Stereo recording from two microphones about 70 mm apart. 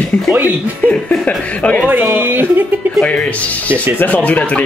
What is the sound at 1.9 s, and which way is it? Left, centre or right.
Speech, right.